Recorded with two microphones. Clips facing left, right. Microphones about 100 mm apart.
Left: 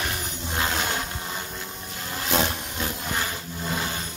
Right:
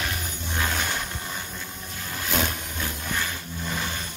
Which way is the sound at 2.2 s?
25° left (ahead or behind).